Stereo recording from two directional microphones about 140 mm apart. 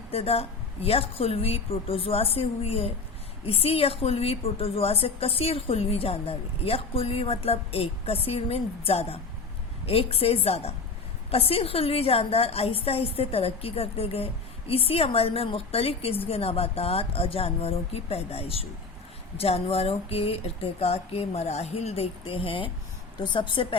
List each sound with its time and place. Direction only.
0.1 s a woman's voice: 45° left (ahead or behind)